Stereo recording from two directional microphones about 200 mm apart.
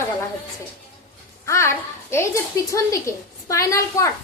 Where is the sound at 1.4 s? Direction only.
15° left (ahead or behind).